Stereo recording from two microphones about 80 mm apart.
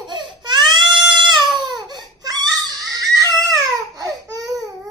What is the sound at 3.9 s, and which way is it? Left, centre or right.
Baby cry, right.